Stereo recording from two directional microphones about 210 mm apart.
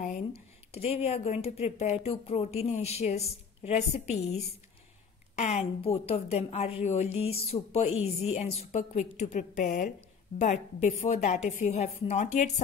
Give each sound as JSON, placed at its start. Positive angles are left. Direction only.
{"t": 0.0, "sound": "a woman's voice", "side_deg": 35}